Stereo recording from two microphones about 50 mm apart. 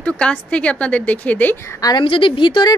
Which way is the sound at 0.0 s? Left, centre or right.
Left.